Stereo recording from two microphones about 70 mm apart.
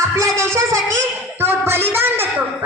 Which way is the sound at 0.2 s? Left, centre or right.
Right.